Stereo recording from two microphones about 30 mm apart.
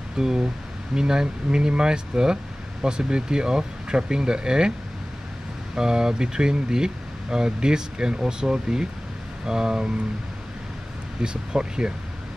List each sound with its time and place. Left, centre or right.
0.2 s speech: centre
5.8 s speech: right
11.2 s speech: right